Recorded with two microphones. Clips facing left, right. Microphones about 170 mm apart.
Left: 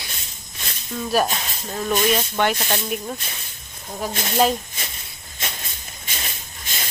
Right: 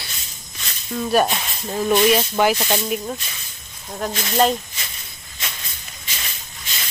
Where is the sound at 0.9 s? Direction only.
Centre (ahead or behind).